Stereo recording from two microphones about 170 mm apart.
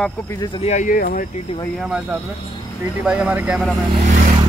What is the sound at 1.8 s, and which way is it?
Speech, 5° right (ahead or behind).